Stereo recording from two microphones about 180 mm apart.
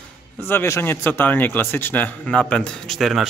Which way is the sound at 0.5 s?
10° left (ahead or behind).